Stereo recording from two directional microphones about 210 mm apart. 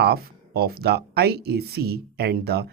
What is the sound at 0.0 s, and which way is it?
Speech, 50° right (ahead or behind).